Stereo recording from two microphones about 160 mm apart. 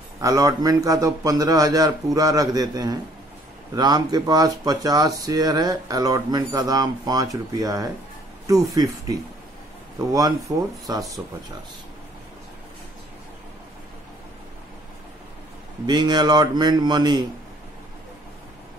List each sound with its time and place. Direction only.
0.2 s speech: 20° right (ahead or behind)
15.9 s speech: 25° right (ahead or behind)